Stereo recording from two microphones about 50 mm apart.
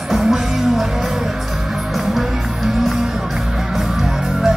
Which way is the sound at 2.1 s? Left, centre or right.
Centre.